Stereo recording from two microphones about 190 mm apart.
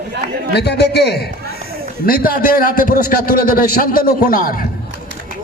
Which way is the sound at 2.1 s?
50° left (ahead or behind).